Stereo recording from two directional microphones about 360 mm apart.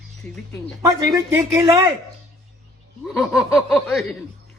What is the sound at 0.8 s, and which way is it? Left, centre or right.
Speech, centre.